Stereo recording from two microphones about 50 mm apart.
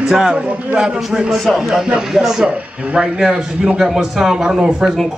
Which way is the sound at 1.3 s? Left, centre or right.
Centre.